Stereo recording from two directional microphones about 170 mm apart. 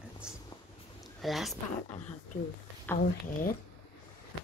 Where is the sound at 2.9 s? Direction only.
10° left (ahead or behind).